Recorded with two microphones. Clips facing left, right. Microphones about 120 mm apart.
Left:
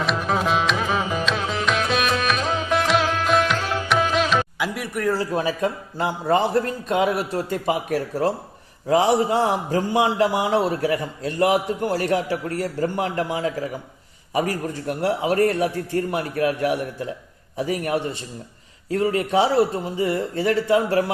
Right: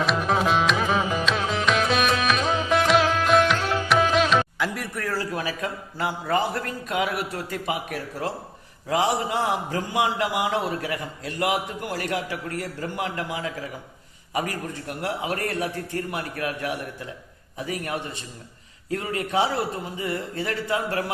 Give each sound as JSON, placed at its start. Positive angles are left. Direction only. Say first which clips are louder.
{"t": 0.0, "sound": "music", "louder": "even", "side_deg": 0}
{"t": 4.6, "sound": "a man's voice", "louder": "left 5 dB", "side_deg": 10}